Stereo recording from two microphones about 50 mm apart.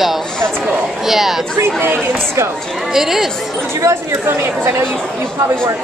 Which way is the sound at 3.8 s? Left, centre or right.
Right.